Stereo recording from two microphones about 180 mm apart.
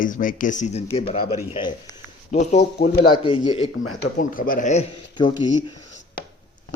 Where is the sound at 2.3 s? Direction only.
40° left (ahead or behind).